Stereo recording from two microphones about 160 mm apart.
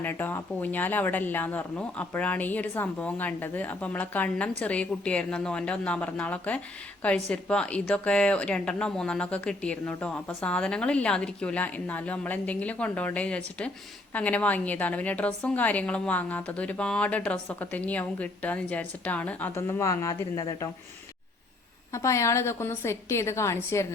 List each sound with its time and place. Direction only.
0.0 s a woman's voice: 10° left (ahead or behind)
21.9 s a woman's voice: 20° left (ahead or behind)